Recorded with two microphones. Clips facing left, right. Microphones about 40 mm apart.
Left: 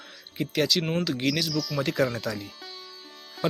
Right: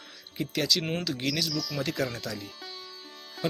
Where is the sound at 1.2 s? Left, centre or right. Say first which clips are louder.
Left 4 dB; centre.